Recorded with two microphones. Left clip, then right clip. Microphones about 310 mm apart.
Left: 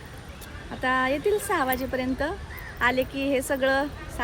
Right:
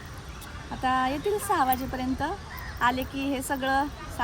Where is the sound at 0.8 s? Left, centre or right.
Centre.